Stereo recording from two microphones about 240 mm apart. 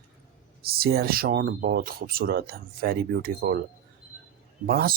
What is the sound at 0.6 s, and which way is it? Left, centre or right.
Speech, right.